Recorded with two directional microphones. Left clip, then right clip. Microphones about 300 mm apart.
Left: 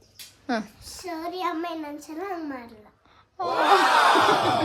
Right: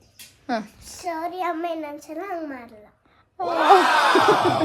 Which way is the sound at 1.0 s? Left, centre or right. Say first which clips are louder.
Right 3 dB; centre.